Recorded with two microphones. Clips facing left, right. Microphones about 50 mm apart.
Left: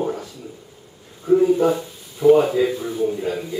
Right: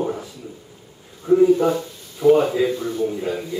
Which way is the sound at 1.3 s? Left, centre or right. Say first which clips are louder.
Right 1 dB; centre.